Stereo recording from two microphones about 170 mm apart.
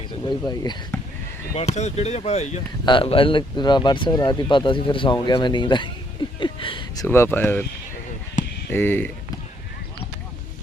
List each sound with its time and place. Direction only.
0.3 s speech: 25° left (ahead or behind)
1.5 s speech: 40° left (ahead or behind)
2.8 s speech: 30° left (ahead or behind)
6.4 s a sound: 30° left (ahead or behind); by 7.6 s 10° left (ahead or behind)
8.7 s speech: 10° left (ahead or behind)